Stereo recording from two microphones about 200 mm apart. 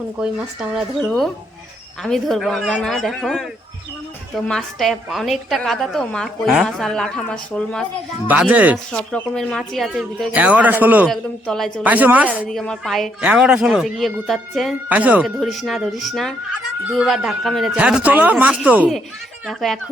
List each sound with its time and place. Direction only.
0.2 s speech: 5° right (ahead or behind)
4.4 s speech: centre (ahead or behind)
8.3 s a woman's voice: 5° right (ahead or behind)
8.9 s speech: 5° left (ahead or behind)
11.1 s a woman's voice: centre (ahead or behind)